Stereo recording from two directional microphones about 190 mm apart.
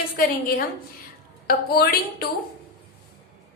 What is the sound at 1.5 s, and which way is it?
Speech, 55° left (ahead or behind).